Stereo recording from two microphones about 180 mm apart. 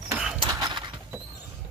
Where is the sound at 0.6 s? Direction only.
25° right (ahead or behind).